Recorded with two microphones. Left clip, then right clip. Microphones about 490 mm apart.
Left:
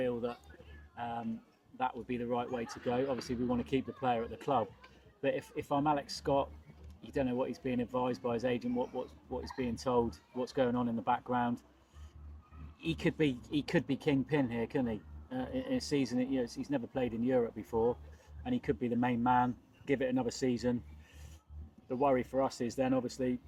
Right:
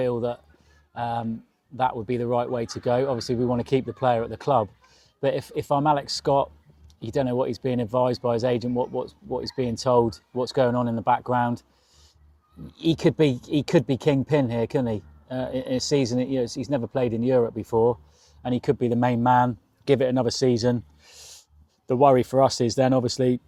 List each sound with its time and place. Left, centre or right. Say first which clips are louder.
0.0 s speech: right 10 dB; right
12.8 s speech: right 12 dB; right
21.8 s speech: right 13 dB; right